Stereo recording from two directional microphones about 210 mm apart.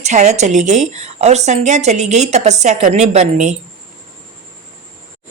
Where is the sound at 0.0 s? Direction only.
35° right (ahead or behind).